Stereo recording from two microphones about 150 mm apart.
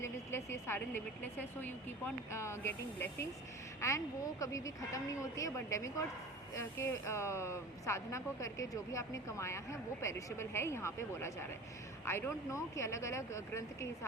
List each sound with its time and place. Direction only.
0.0 s a woman's voice: 20° left (ahead or behind)